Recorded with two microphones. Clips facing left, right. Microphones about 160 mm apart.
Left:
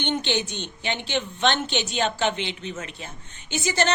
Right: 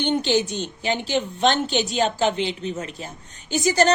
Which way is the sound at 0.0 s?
35° right (ahead or behind).